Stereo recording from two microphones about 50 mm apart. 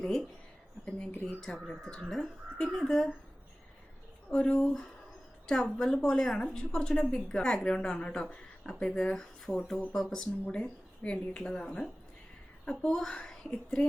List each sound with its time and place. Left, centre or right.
0.0 s a woman's voice: centre
2.6 s a woman's voice: centre
4.3 s speech: left
5.7 s a woman's voice: centre